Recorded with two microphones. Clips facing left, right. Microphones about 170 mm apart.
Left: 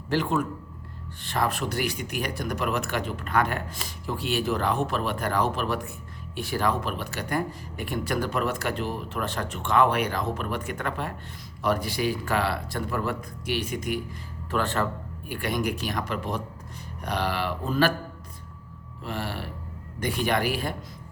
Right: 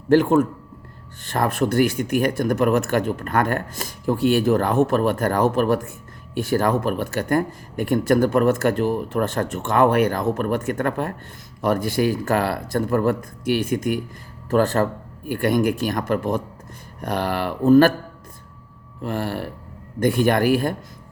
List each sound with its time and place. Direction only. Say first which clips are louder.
0.1 s speech: right 10 dB; 50° right (ahead or behind)
19.0 s speech: right 7 dB; 50° right (ahead or behind)